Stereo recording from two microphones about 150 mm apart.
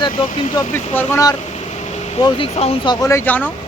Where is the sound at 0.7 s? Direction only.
15° left (ahead or behind).